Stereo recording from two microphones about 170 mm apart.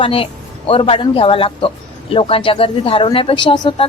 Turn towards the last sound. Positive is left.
turn(degrees=25)  # may be behind; listen again after turning